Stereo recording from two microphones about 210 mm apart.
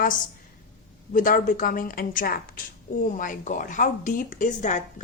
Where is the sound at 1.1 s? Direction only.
40° left (ahead or behind).